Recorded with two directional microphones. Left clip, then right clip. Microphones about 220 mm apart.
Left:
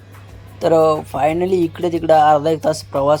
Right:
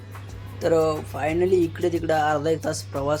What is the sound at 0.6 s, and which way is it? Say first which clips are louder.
Speech: left 8 dB; 20° left (ahead or behind).